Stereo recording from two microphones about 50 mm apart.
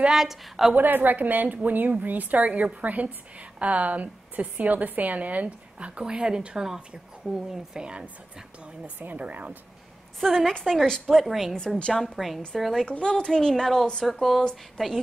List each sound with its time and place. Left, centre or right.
0.1 s a woman's voice: centre
0.7 s a woman's voice: right; by 8.1 s centre
9.0 s speech: right
10.2 s a woman's voice: centre
12.8 s a woman's voice: centre
14.8 s a woman's voice: centre